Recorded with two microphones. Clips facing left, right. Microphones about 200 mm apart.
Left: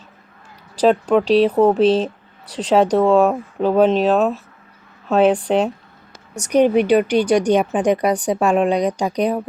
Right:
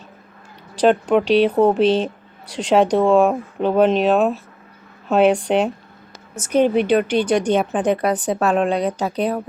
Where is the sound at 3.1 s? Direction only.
10° right (ahead or behind).